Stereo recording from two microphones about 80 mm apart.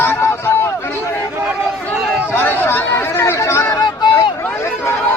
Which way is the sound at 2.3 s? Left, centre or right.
Left.